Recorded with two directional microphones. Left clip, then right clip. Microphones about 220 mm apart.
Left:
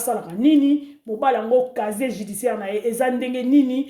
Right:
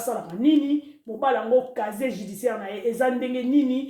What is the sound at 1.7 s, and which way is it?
Speech, 50° left (ahead or behind).